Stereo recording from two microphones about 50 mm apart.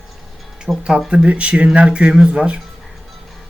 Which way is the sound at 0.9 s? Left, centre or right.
Centre.